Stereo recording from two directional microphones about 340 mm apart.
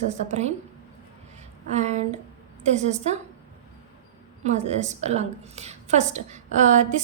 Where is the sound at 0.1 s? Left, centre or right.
Centre.